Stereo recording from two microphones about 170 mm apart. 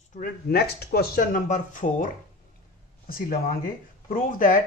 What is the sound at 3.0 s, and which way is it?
Speech, 60° left (ahead or behind).